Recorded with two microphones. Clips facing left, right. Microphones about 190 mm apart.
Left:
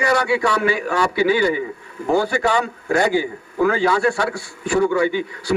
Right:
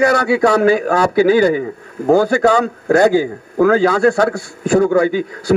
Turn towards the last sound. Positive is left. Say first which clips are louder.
# right 5 dB
turn(degrees=-45)  # may be behind; listen again after turning